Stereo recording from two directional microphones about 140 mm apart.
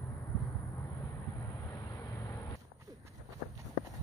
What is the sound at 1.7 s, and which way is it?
Vehicle, 25° left (ahead or behind).